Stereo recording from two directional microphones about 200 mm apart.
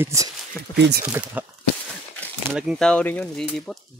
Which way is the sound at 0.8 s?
55° right (ahead or behind).